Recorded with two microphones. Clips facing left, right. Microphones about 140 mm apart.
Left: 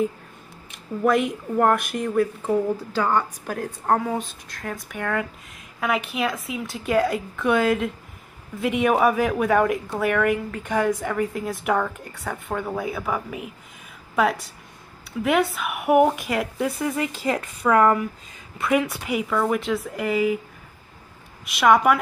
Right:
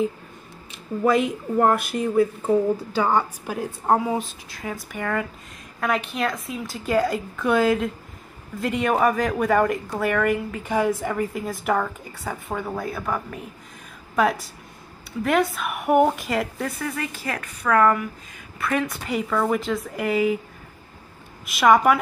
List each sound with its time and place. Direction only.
1.0 s a woman's voice: centre (ahead or behind)
16.8 s a woman's voice: 20° left (ahead or behind); by 20.3 s centre (ahead or behind)
21.5 s a woman's voice: centre (ahead or behind)